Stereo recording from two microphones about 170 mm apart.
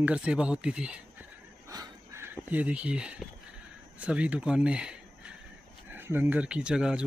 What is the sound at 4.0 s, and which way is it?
Speech, 5° right (ahead or behind).